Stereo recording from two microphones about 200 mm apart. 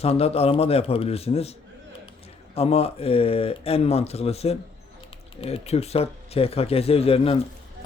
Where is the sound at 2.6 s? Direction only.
30° left (ahead or behind).